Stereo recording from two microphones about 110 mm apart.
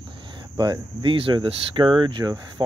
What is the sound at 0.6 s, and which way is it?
Speech, 45° right (ahead or behind).